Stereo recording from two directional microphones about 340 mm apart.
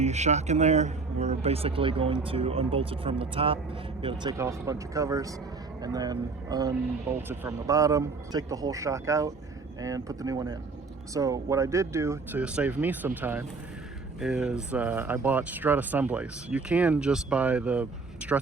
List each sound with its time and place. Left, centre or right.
0.0 s a man's voice: centre